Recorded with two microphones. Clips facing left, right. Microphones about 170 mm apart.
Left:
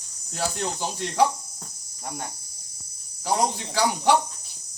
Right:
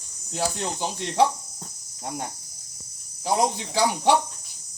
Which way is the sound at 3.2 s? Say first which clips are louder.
Right 1 dB; 25° right (ahead or behind).